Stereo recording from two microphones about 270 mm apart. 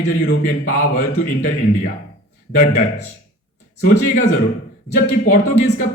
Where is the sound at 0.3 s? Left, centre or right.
Left.